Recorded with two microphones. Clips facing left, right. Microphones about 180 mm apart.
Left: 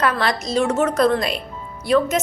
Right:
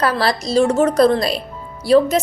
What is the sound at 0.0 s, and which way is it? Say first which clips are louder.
A woman's voice: right 2 dB; 35° right (ahead or behind).